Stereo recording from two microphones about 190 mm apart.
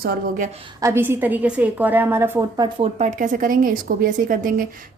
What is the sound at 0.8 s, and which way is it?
A woman's voice, 15° right (ahead or behind).